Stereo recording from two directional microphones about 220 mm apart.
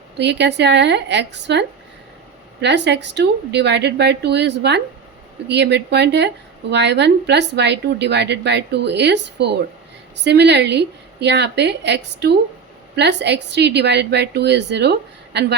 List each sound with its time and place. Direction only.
0.2 s a woman's voice: 50° right (ahead or behind)